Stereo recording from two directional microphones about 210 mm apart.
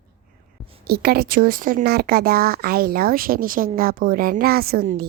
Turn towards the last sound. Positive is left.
turn(degrees=-45)  # may be behind; listen again after turning